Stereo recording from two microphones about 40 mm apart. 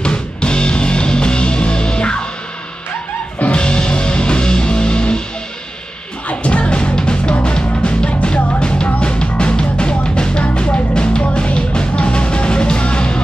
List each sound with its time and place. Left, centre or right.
0.0 s music: left
3.3 s music: left
6.2 s music: left